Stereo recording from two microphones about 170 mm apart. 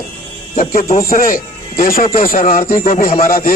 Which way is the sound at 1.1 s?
55° left (ahead or behind).